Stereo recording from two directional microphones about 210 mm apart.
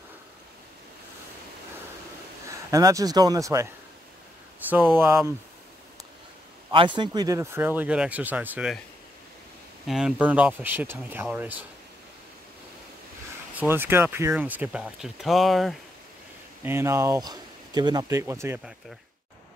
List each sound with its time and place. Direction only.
2.4 s speech: 15° right (ahead or behind)
6.7 s speech: 25° right (ahead or behind); by 8.8 s 5° right (ahead or behind)
9.8 s speech: centre (ahead or behind)
13.6 s speech: 10° right (ahead or behind)
16.6 s speech: 10° right (ahead or behind)